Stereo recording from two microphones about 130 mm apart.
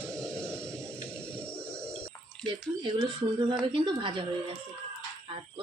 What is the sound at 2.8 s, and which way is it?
Speech, 35° right (ahead or behind).